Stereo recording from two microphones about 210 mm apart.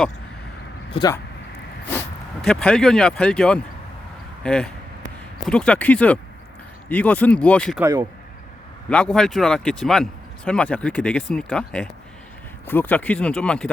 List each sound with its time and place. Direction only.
0.9 s speech: 25° left (ahead or behind)
2.5 s speech: 5° left (ahead or behind)
7.8 s speech: 15° right (ahead or behind)
8.9 s speech: 5° left (ahead or behind)